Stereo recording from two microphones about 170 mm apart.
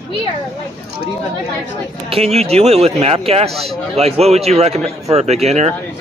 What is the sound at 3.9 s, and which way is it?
Speech, 40° right (ahead or behind).